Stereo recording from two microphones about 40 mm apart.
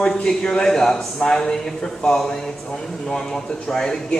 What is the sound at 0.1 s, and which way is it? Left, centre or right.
Speech, centre.